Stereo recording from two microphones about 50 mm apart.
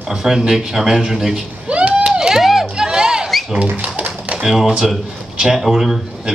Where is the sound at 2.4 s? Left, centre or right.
Centre.